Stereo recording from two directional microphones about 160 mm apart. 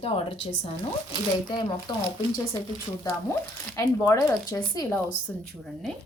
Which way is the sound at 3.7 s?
20° left (ahead or behind).